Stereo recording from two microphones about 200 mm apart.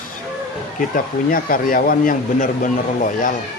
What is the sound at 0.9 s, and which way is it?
Speech, 45° left (ahead or behind).